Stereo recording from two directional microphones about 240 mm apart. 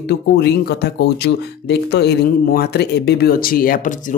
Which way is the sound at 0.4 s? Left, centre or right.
Left.